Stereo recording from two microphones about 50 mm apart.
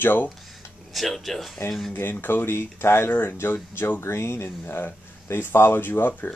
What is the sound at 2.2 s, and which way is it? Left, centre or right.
Speech, left.